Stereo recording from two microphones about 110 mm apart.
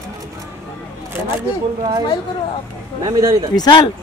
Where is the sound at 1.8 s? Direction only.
40° right (ahead or behind).